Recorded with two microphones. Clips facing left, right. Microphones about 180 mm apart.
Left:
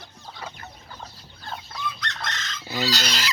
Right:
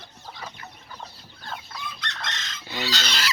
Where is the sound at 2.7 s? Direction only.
40° left (ahead or behind).